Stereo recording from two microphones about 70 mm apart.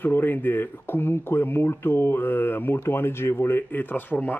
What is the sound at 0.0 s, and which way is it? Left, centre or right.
Speech, left.